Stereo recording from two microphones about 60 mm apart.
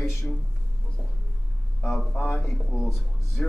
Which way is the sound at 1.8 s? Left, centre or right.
Centre.